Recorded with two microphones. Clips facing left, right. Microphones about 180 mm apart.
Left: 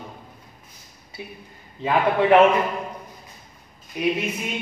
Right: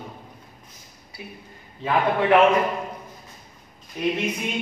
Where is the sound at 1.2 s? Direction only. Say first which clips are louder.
Left 2 dB; 25° left (ahead or behind).